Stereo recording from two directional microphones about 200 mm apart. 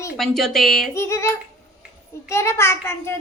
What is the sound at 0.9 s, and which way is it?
Child singing, 15° left (ahead or behind).